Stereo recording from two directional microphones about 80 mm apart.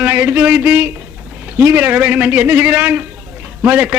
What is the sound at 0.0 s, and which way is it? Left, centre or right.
A man's voice, right.